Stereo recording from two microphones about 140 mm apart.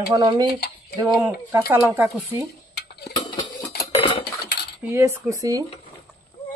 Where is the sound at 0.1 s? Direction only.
30° right (ahead or behind).